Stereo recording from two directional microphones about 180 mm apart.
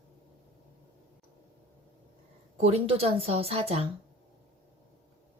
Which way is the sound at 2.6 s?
35° right (ahead or behind).